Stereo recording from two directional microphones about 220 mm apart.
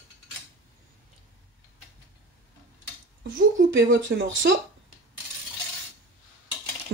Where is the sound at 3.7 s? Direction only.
55° right (ahead or behind).